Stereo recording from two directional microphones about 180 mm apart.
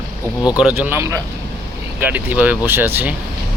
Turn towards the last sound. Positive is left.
turn(degrees=-10)  # may be behind; listen again after turning